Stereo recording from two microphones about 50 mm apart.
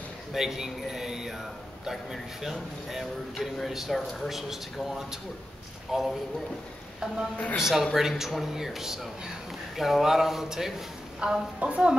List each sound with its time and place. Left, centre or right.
0.3 s speech: centre
7.5 s a woman's voice: centre; by 11.9 s right